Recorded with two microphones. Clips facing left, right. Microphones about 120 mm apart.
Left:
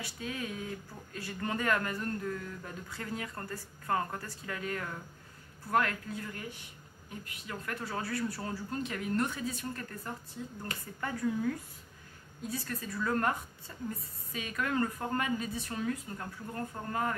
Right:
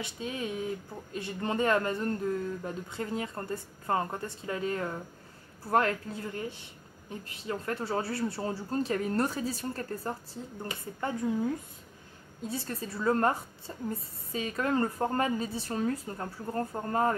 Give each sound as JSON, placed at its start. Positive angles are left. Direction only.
{"t": 0.0, "sound": "a woman's voice", "side_deg": -20}